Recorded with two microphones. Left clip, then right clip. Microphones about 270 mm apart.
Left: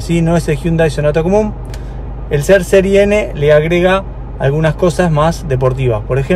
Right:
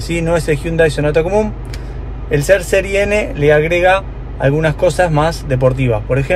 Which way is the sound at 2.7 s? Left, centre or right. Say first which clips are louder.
Left 4 dB; centre.